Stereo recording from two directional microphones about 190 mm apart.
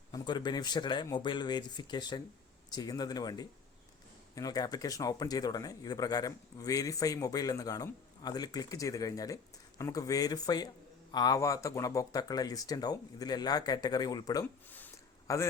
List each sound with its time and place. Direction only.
0.1 s a man's voice: 25° left (ahead or behind)